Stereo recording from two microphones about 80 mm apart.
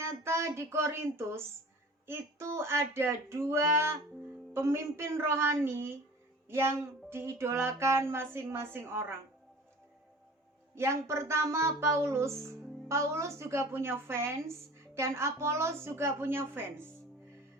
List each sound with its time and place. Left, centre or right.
0.0 s a woman's voice: right
10.8 s a woman's voice: right